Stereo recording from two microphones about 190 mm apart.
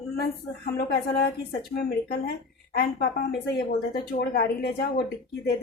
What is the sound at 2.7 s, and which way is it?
Speech, 60° left (ahead or behind).